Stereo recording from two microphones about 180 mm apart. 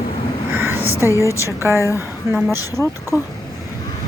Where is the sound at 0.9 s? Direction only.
15° left (ahead or behind).